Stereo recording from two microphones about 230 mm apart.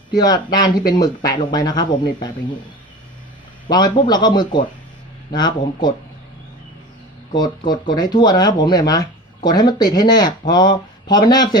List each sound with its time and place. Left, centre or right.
0.2 s speech: centre
3.7 s speech: centre
7.3 s speech: centre